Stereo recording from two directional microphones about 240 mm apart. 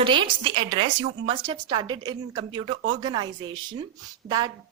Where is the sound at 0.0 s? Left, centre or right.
Right.